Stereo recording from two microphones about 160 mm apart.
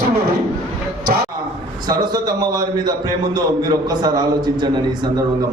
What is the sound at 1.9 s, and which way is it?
A man's voice, 25° right (ahead or behind).